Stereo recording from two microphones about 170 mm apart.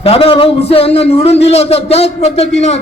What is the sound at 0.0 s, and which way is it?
A man's voice, 35° left (ahead or behind).